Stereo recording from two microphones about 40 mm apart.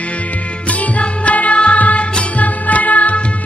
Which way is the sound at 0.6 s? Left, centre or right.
Left.